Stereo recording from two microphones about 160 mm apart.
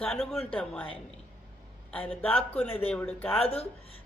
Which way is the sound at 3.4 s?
40° left (ahead or behind).